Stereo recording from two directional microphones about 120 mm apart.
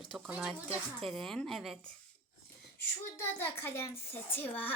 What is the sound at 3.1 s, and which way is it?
A child's voice, 20° left (ahead or behind).